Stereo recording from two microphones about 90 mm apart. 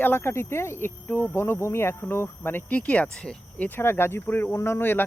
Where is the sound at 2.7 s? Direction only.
15° left (ahead or behind).